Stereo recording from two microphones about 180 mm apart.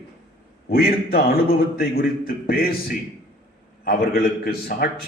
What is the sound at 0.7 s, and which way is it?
A man's voice, 55° left (ahead or behind).